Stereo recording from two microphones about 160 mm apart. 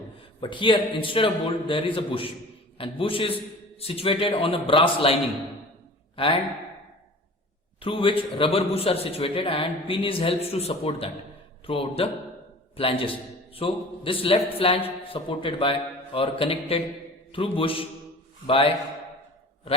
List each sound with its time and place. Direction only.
0.4 s a man's voice: 30° left (ahead or behind)
6.1 s a man's voice: 35° left (ahead or behind)
7.8 s a man's voice: 35° left (ahead or behind)